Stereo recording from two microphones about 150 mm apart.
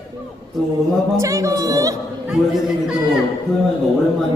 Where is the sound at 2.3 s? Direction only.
Centre (ahead or behind).